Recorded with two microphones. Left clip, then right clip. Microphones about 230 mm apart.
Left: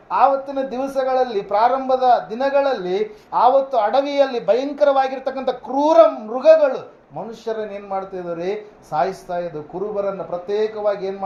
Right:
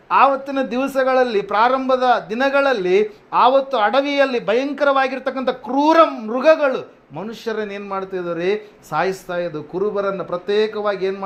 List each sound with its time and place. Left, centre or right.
0.1 s a man's voice: right